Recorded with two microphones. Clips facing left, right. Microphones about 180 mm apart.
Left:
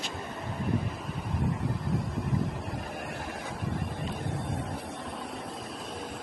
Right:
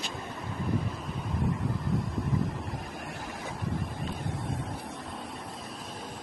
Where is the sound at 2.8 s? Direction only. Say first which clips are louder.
Left 2 dB; 65° left (ahead or behind).